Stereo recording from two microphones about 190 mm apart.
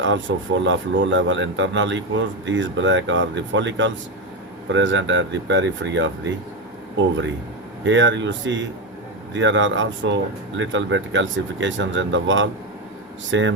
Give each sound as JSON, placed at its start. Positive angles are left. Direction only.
{"t": 0.0, "sound": "speech", "side_deg": -75}
{"t": 7.9, "sound": "speech", "side_deg": -75}